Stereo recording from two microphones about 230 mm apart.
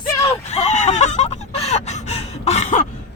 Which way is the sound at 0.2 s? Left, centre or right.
Left.